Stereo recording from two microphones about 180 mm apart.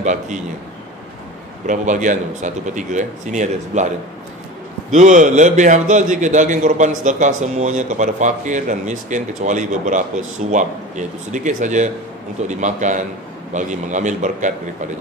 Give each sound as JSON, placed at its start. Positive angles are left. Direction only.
{"t": 0.0, "sound": "a man's voice", "side_deg": -40}
{"t": 1.7, "sound": "a man's voice", "side_deg": -45}
{"t": 4.9, "sound": "a man's voice", "side_deg": -40}